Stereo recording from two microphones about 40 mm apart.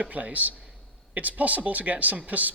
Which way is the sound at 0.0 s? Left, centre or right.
Right.